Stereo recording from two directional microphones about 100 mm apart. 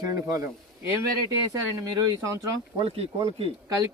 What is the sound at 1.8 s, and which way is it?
Speech, 35° right (ahead or behind).